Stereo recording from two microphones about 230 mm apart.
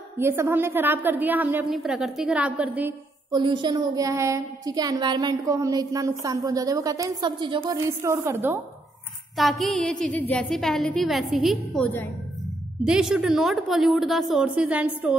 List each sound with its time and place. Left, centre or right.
0.2 s a woman's voice: centre
3.3 s a woman's voice: centre
9.4 s a woman's voice: centre